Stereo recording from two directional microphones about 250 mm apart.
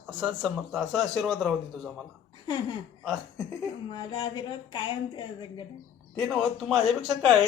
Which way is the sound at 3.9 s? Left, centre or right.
Centre.